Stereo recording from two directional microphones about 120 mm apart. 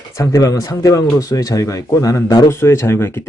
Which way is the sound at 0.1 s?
30° left (ahead or behind).